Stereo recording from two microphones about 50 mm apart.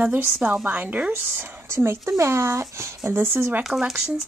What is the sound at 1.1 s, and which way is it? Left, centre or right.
Speech, right.